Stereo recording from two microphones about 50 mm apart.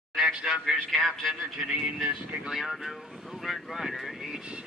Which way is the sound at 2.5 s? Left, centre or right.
Centre.